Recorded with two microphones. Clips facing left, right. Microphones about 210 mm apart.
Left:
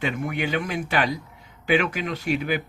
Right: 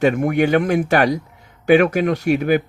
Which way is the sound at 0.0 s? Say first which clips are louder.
Right 11 dB; 50° right (ahead or behind).